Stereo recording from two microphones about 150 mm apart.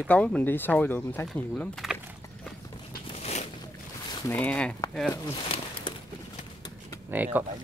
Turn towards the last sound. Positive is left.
turn(degrees=-10)  # may be behind; listen again after turning